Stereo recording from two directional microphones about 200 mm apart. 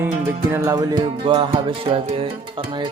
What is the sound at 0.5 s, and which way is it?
Speech, 15° right (ahead or behind).